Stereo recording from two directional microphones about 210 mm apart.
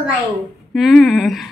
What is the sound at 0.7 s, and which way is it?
Speech, centre (ahead or behind).